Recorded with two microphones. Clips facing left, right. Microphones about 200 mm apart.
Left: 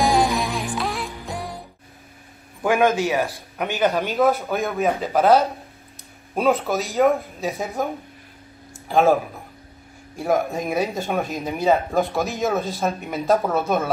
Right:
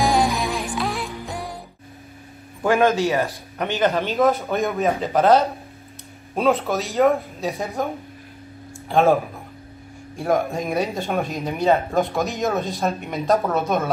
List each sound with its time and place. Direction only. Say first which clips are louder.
0.0 s music: even; centre (ahead or behind)
2.6 s a man's voice: right 1 dB; 10° left (ahead or behind)